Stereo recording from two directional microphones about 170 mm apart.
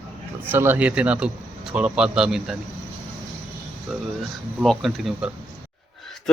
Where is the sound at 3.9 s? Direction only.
Centre (ahead or behind).